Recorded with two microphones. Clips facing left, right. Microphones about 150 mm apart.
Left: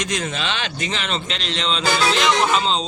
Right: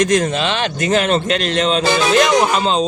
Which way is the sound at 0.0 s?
45° right (ahead or behind).